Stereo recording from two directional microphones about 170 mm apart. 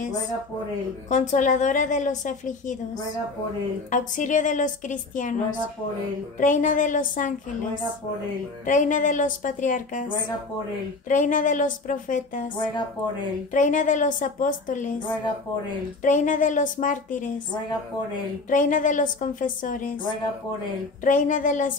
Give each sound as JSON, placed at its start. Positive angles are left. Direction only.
{"t": 1.1, "sound": "a woman's voice", "side_deg": 45}
{"t": 3.9, "sound": "a woman's voice", "side_deg": 50}
{"t": 8.6, "sound": "a woman's voice", "side_deg": 50}
{"t": 11.1, "sound": "a woman's voice", "side_deg": 50}
{"t": 13.5, "sound": "a woman's voice", "side_deg": 50}
{"t": 16.0, "sound": "a woman's voice", "side_deg": 50}
{"t": 18.5, "sound": "a woman's voice", "side_deg": 50}
{"t": 21.0, "sound": "a woman's voice", "side_deg": 50}